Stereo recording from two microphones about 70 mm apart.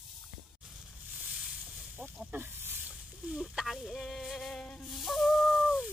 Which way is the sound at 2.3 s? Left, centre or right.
Right.